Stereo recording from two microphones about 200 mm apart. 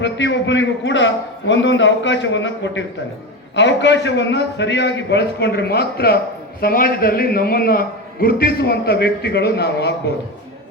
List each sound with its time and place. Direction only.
0.0 s a man's voice: 65° left (ahead or behind)